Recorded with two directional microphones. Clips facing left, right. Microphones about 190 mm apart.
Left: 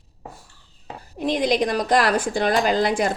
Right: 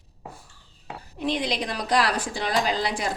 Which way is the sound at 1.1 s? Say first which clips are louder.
Left 6 dB; 45° left (ahead or behind).